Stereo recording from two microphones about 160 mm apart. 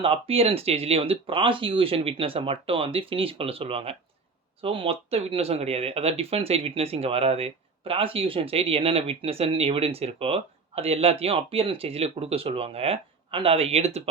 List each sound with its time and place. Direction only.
0.0 s speech: 35° right (ahead or behind)